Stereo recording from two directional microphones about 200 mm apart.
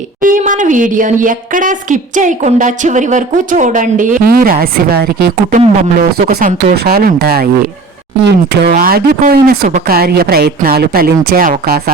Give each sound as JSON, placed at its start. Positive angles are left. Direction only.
{"t": 0.2, "sound": "speech", "side_deg": -40}
{"t": 6.1, "sound": "a woman's voice", "side_deg": -50}